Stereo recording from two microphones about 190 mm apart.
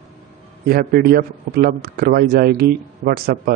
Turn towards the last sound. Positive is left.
turn(degrees=-55)  # may be behind; listen again after turning